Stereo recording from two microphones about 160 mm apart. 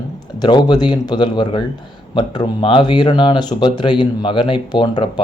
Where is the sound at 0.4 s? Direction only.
25° left (ahead or behind).